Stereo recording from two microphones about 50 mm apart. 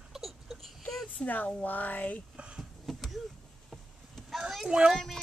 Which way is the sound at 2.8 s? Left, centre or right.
Centre.